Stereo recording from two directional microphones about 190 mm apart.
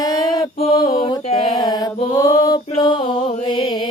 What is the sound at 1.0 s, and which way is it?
Mantra, 30° left (ahead or behind).